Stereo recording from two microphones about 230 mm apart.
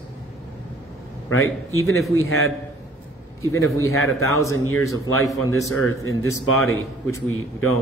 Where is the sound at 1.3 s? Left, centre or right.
Left.